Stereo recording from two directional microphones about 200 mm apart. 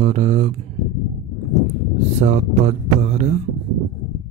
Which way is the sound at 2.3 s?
35° right (ahead or behind).